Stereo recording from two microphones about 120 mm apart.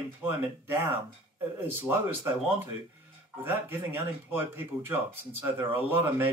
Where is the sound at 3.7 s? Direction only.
20° right (ahead or behind).